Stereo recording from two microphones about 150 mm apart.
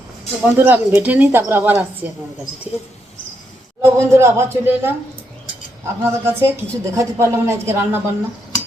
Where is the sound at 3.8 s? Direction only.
20° right (ahead or behind).